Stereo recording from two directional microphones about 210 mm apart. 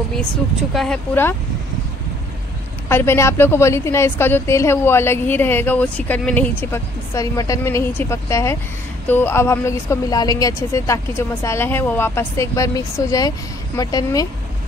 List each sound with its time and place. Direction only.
0.7 s a woman's voice: 5° left (ahead or behind)
2.9 s a woman's voice: 10° left (ahead or behind)